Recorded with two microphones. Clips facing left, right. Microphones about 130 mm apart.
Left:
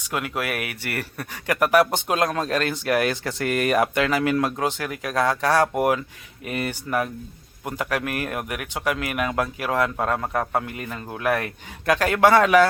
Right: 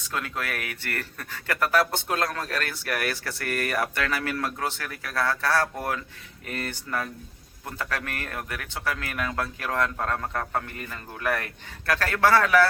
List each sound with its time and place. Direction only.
0.0 s speech: 15° left (ahead or behind)